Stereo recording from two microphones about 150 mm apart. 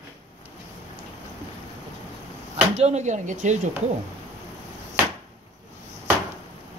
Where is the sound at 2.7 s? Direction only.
50° right (ahead or behind).